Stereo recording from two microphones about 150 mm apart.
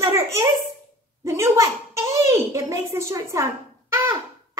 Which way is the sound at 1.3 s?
20° right (ahead or behind).